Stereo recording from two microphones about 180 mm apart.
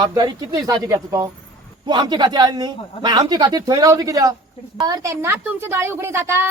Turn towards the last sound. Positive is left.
turn(degrees=-15)  # may be behind; listen again after turning